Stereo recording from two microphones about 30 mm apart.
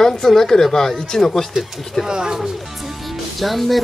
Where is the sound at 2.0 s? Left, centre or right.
Right.